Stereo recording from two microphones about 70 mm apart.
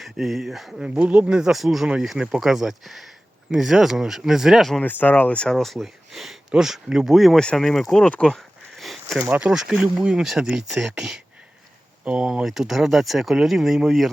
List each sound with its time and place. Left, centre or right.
0.0 s speech: centre
0.9 s speech: centre
4.8 s speech: left
5.5 s speech: centre
8.2 s a sound: centre
9.2 s speech: right
9.5 s speech: centre